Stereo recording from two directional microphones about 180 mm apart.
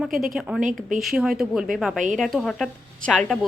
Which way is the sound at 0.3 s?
5° right (ahead or behind).